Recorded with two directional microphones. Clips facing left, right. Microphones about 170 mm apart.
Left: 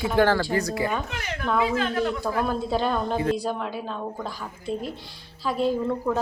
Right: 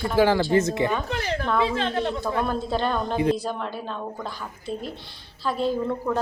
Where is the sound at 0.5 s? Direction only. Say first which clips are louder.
Right 4 dB; 20° right (ahead or behind).